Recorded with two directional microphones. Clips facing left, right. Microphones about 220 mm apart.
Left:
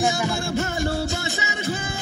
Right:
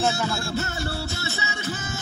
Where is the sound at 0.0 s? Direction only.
15° left (ahead or behind).